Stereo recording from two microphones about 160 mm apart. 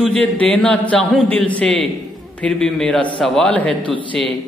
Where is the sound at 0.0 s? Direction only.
5° left (ahead or behind).